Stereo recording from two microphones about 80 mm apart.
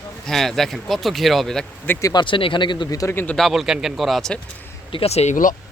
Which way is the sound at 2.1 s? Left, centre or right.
Left.